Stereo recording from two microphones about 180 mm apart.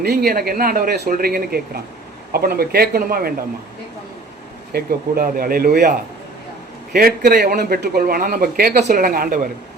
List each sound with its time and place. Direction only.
0.0 s speech: 60° right (ahead or behind)
4.7 s a man's voice: 55° right (ahead or behind)